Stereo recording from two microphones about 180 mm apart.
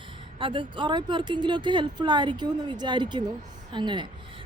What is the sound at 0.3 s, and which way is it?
A woman's voice, 30° right (ahead or behind).